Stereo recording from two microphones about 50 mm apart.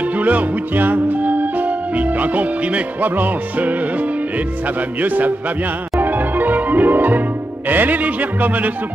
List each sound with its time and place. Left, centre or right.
0.2 s music: right
5.0 s speech: right
5.9 s music: right